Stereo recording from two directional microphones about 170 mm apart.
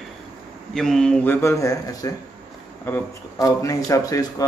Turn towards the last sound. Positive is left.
turn(degrees=20)  # may be behind; listen again after turning